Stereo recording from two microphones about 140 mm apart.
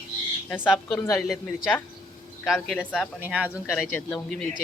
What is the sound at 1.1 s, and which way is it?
Speech, 5° left (ahead or behind).